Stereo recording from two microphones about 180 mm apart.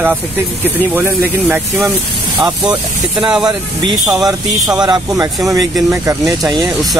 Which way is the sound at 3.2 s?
5° right (ahead or behind).